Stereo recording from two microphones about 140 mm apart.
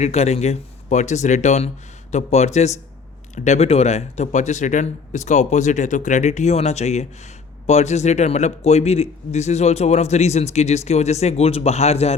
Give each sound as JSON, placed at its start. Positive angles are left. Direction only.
{"t": 0.0, "sound": "a man's voice", "side_deg": 50}